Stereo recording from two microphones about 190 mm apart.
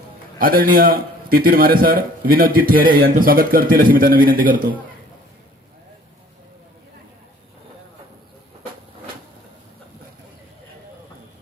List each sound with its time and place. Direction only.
0.3 s a man's voice: 50° right (ahead or behind)